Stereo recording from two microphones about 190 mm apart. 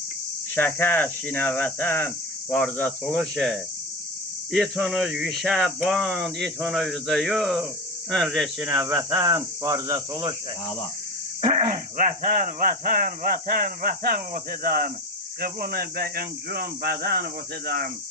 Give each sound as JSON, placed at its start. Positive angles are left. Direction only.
{"t": 0.5, "sound": "cricket", "side_deg": 10}
{"t": 3.0, "sound": "speech", "side_deg": 0}
{"t": 9.1, "sound": "cricket", "side_deg": -20}
{"t": 11.7, "sound": "speech", "side_deg": -45}